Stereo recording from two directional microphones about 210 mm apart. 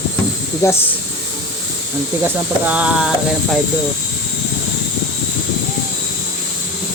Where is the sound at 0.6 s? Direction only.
15° left (ahead or behind).